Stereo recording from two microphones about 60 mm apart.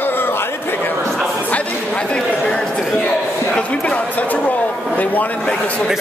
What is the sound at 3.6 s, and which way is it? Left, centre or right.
Speech, left.